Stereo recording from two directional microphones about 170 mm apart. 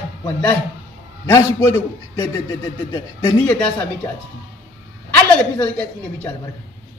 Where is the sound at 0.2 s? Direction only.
10° left (ahead or behind).